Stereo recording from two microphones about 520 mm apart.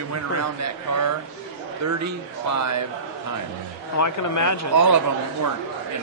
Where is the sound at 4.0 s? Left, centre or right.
Left.